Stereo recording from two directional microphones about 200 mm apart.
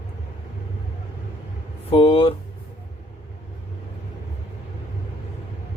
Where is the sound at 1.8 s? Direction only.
30° left (ahead or behind).